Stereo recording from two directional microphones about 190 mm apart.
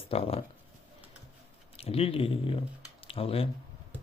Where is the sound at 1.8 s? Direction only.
30° left (ahead or behind).